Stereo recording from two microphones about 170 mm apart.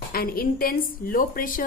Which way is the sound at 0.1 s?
60° left (ahead or behind).